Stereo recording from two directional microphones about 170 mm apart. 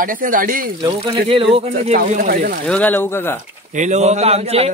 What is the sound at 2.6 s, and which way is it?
Speech, 10° left (ahead or behind).